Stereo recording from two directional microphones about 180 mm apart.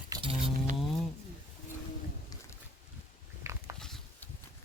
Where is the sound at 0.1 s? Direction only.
30° right (ahead or behind).